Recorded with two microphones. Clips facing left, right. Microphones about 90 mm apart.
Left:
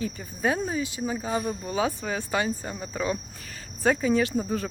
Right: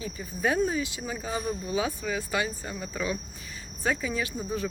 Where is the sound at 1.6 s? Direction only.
40° left (ahead or behind).